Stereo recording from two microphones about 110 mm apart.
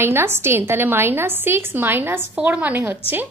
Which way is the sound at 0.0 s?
20° right (ahead or behind).